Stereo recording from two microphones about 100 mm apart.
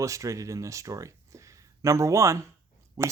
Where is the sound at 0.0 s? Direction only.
30° right (ahead or behind).